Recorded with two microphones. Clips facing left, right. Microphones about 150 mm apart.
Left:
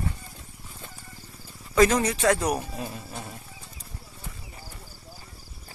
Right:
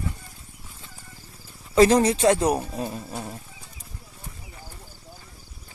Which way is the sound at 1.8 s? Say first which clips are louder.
Right 4 dB; 30° right (ahead or behind).